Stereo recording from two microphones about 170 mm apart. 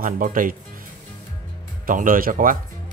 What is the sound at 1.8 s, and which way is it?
Speech, 55° right (ahead or behind).